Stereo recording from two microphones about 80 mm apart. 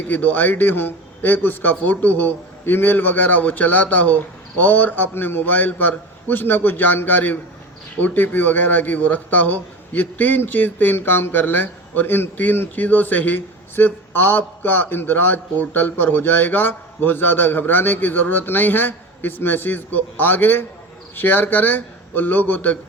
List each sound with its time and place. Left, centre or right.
0.1 s a man's voice: left